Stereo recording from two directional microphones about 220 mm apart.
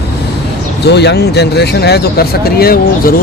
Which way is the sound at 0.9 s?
50° left (ahead or behind).